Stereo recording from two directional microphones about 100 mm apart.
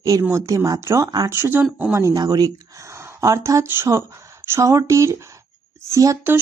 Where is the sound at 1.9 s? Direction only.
35° right (ahead or behind).